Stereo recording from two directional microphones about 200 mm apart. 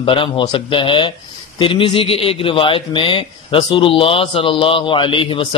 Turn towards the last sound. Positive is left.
turn(degrees=25)  # may be behind; listen again after turning